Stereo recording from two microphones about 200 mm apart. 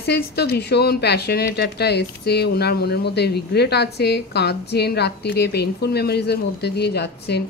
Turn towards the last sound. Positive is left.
turn(degrees=55)  # may be behind; listen again after turning